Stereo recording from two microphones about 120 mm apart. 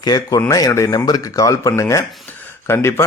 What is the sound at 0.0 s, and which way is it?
Speech, 30° left (ahead or behind).